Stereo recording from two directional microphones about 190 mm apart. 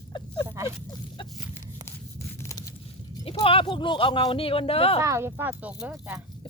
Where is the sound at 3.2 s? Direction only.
30° left (ahead or behind).